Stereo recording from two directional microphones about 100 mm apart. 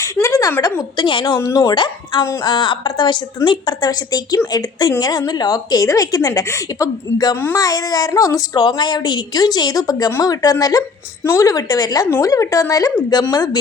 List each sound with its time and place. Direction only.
0.0 s a sound: 30° left (ahead or behind)
0.8 s a woman's voice: 50° left (ahead or behind)
1.4 s a woman's voice: 35° left (ahead or behind)
1.7 s a woman's voice: 50° left (ahead or behind)